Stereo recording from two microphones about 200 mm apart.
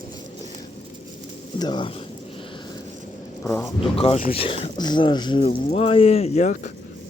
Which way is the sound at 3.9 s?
30° left (ahead or behind).